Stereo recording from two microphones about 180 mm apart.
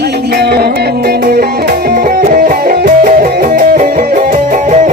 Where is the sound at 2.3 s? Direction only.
50° right (ahead or behind).